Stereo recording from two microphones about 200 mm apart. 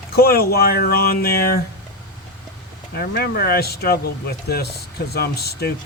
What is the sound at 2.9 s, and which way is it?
Speech, 50° left (ahead or behind).